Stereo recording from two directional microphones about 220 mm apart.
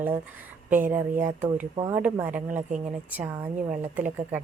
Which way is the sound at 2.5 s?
35° right (ahead or behind).